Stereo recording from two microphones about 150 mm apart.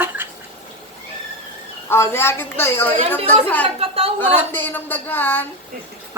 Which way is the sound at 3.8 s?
40° right (ahead or behind).